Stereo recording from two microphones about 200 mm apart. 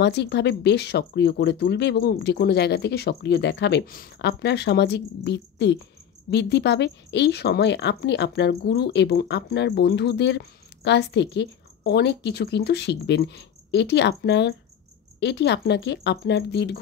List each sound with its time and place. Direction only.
0.0 s a woman's voice: 60° left (ahead or behind)